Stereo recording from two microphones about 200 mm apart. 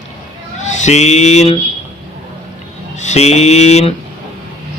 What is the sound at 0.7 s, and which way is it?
Mantra, 35° left (ahead or behind).